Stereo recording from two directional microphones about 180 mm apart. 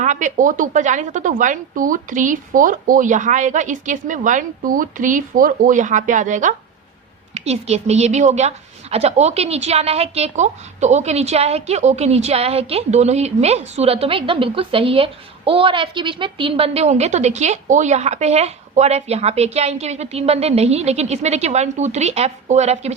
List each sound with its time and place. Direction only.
0.0 s a woman's voice: 45° right (ahead or behind)